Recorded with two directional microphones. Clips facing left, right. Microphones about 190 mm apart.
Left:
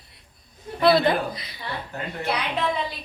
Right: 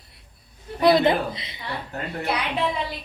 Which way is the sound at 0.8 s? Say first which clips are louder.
Right 1 dB; 20° right (ahead or behind).